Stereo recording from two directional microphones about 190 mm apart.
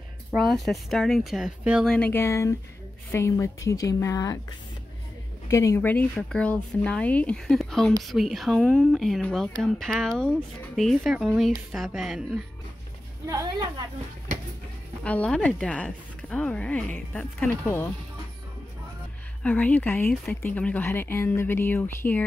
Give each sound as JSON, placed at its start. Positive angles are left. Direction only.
{"t": 0.4, "sound": "speech", "side_deg": 0}
{"t": 2.0, "sound": "speech", "side_deg": 10}
{"t": 13.3, "sound": "a woman's voice", "side_deg": -20}
{"t": 15.0, "sound": "speech", "side_deg": 5}
{"t": 19.4, "sound": "speech", "side_deg": 5}